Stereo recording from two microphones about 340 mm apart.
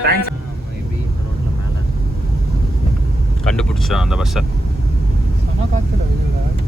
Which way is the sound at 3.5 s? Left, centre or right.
Centre.